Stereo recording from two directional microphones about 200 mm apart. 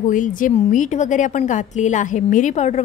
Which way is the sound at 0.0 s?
40° left (ahead or behind).